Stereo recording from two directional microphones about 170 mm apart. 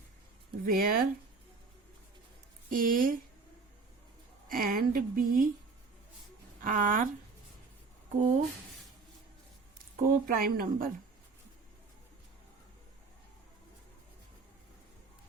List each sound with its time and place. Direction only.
0.6 s speech: 60° right (ahead or behind)
2.6 s speech: 55° right (ahead or behind)
4.4 s speech: 55° right (ahead or behind)
6.6 s speech: 50° right (ahead or behind)
8.1 s speech: 45° right (ahead or behind)
9.7 s speech: 55° right (ahead or behind)